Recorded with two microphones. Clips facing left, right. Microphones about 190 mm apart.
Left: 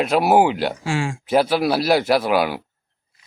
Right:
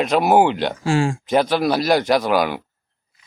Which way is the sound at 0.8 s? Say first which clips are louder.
Right 5 dB; 35° right (ahead or behind).